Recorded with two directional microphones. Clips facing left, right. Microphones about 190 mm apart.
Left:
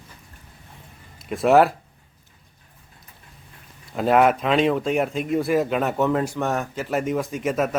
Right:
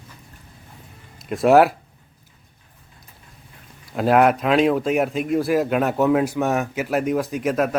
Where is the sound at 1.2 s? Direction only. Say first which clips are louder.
Right 2 dB; centre (ahead or behind).